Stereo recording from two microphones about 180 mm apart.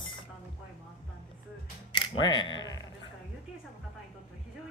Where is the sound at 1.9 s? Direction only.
25° left (ahead or behind).